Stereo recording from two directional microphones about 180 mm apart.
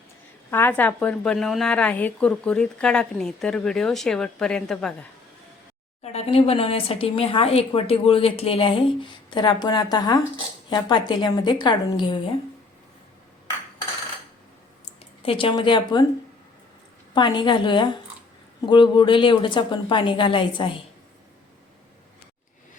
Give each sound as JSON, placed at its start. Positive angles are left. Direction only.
{"t": 0.5, "sound": "a woman's voice", "side_deg": 10}
{"t": 6.0, "sound": "a woman's voice", "side_deg": 35}
{"t": 15.2, "sound": "a woman's voice", "side_deg": 30}
{"t": 17.2, "sound": "a woman's voice", "side_deg": 25}